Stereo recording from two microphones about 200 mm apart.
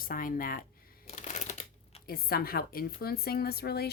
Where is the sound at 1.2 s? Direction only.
35° left (ahead or behind).